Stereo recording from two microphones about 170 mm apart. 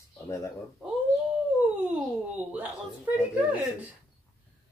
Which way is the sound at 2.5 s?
10° right (ahead or behind).